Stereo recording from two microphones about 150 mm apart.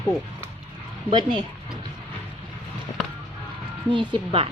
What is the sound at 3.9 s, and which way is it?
Speech, 35° right (ahead or behind).